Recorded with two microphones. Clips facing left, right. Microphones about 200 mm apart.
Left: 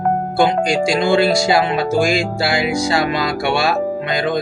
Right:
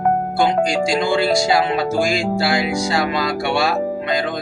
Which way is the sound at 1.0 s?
70° left (ahead or behind).